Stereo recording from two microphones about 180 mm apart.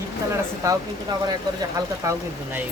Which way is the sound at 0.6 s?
15° right (ahead or behind).